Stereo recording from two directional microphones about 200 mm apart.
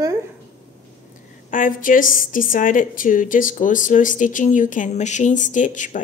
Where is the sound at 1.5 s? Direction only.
40° left (ahead or behind).